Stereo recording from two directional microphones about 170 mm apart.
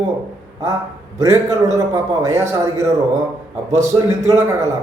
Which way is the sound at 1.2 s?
20° right (ahead or behind).